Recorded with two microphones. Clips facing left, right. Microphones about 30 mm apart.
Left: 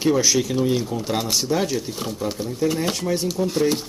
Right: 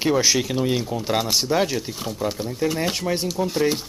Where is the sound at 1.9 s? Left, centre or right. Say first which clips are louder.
Even; centre.